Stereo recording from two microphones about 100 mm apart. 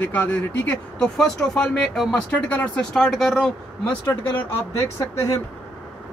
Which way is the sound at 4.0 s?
25° left (ahead or behind).